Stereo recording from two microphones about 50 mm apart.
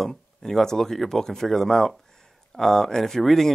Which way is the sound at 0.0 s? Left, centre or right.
Centre.